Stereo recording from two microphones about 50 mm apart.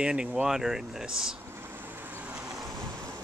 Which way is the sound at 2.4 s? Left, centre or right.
Right.